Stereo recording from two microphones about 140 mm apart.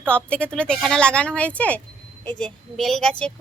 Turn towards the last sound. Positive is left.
turn(degrees=0)  # may be behind; listen again after turning